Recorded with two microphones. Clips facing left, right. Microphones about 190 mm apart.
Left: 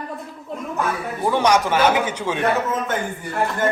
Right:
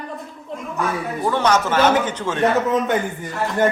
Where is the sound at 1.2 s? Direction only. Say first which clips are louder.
Left 1 dB; 15° left (ahead or behind).